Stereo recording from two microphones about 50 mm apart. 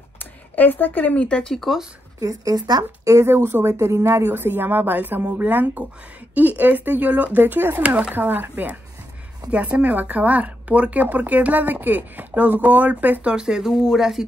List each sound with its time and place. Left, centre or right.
0.2 s speech: left
1.4 s speech: centre
3.3 s speech: right
3.6 s speech: right
4.3 s speech: right
7.8 s speech: right
8.1 s speech: right
9.5 s speech: right
13.3 s speech: centre